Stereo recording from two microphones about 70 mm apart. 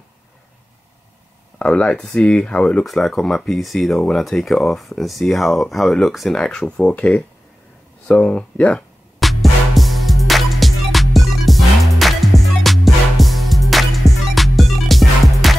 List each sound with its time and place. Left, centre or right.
1.6 s speech: centre
2.8 s speech: centre
9.2 s music: centre